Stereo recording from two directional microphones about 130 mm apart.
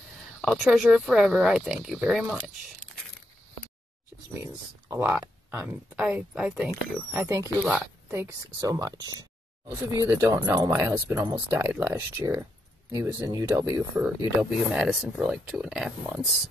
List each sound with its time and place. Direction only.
0.4 s a sound: 5° left (ahead or behind)
0.7 s speech: 5° right (ahead or behind)
5.5 s speech: 15° right (ahead or behind)
5.9 s speech: 5° right (ahead or behind)
7.2 s speech: 20° right (ahead or behind)
13.9 s speech: 10° right (ahead or behind)